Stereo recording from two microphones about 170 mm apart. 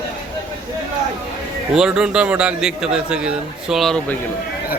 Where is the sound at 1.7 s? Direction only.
5° right (ahead or behind).